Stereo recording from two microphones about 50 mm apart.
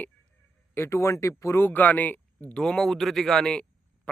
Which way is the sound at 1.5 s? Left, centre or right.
Left.